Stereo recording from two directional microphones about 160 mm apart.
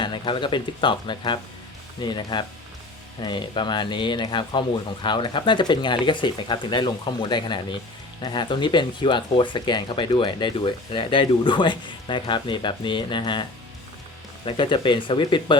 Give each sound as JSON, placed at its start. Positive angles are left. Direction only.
{"t": 0.0, "sound": "speech", "side_deg": 30}
{"t": 14.4, "sound": "speech", "side_deg": 30}